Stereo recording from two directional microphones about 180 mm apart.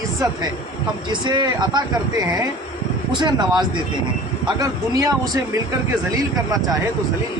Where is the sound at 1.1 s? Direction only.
25° right (ahead or behind).